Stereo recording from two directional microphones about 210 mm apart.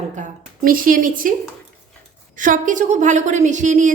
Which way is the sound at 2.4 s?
40° right (ahead or behind).